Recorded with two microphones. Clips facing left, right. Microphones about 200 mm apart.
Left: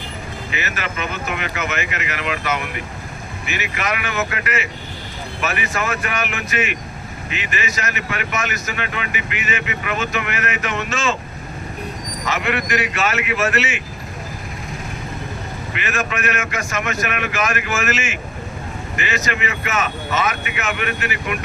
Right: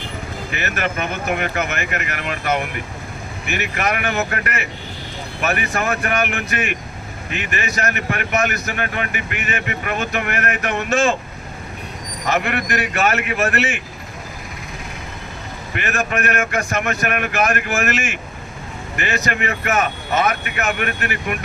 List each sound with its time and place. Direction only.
0.5 s speech: 55° right (ahead or behind)
12.2 s speech: 55° right (ahead or behind)
15.8 s speech: 55° right (ahead or behind)